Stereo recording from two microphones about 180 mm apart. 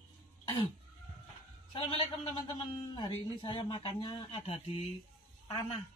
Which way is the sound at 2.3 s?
25° left (ahead or behind).